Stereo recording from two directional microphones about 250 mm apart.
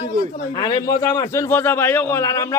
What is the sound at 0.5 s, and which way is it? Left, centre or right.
A man's voice, centre.